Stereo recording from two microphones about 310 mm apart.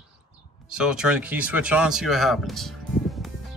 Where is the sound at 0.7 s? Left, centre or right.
Centre.